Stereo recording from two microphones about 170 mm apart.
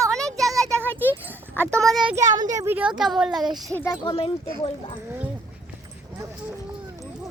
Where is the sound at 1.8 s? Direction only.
5° right (ahead or behind).